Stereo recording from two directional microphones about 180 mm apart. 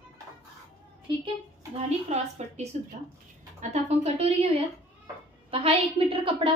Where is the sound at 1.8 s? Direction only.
35° right (ahead or behind).